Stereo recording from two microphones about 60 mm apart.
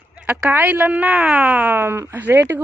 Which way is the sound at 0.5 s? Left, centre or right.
Right.